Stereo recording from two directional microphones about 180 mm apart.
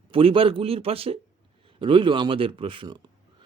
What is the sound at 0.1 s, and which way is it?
Speech, 30° right (ahead or behind).